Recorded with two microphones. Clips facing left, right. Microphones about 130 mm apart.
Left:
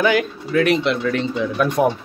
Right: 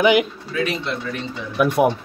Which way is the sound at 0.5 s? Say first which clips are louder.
Left 7 dB; 65° left (ahead or behind).